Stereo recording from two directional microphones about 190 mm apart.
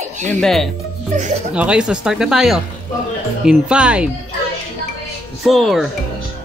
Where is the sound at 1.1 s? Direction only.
40° right (ahead or behind).